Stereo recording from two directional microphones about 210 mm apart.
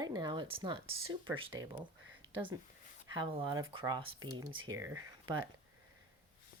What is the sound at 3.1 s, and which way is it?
Speech, 25° right (ahead or behind).